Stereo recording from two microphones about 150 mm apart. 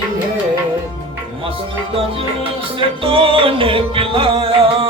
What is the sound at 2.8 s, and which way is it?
Music, 35° right (ahead or behind).